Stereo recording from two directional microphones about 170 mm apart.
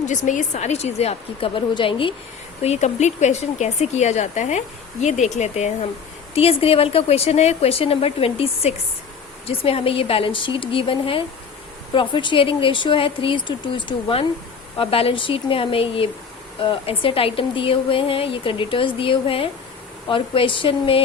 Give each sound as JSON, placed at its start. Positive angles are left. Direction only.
{"t": 0.0, "sound": "a woman's voice", "side_deg": 45}
{"t": 2.6, "sound": "a woman's voice", "side_deg": 40}